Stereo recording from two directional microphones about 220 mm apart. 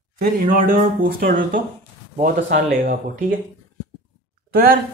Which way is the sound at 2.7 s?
40° right (ahead or behind).